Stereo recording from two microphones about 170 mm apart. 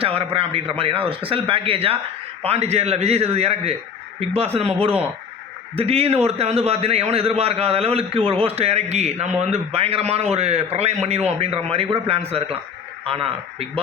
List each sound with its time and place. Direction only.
0.0 s a man's voice: 35° right (ahead or behind)